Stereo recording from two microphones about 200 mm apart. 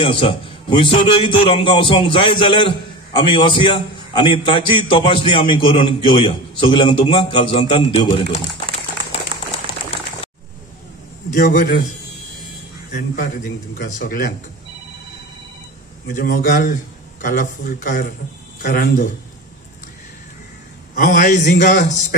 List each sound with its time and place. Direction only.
0.0 s a man's voice: 25° left (ahead or behind)
11.3 s a man's voice: 45° left (ahead or behind)
12.9 s a man's voice: 40° left (ahead or behind)
16.1 s a man's voice: 40° left (ahead or behind)
20.9 s a man's voice: 40° left (ahead or behind)